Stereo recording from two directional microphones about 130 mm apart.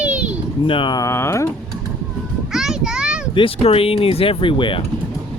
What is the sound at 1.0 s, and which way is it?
Speech, 20° left (ahead or behind).